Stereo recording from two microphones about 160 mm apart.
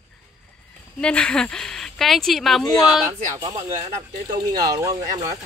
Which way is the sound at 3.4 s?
25° right (ahead or behind).